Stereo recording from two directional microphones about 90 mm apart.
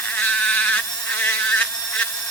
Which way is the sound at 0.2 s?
15° left (ahead or behind).